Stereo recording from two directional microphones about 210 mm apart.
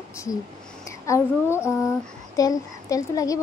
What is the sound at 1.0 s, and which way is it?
Speech, 15° left (ahead or behind).